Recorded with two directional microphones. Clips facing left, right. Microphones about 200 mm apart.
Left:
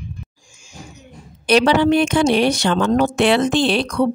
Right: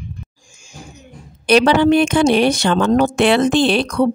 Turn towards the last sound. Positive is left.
turn(degrees=-50)  # may be behind; listen again after turning